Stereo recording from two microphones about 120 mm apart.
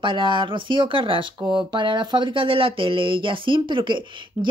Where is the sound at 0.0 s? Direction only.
45° right (ahead or behind).